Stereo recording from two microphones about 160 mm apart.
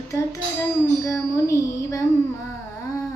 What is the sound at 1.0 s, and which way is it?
Child singing, 20° left (ahead or behind).